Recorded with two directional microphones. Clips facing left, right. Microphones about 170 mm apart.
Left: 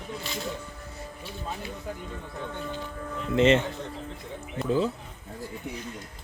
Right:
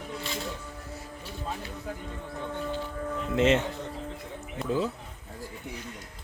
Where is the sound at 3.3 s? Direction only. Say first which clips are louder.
Left 3 dB; centre (ahead or behind).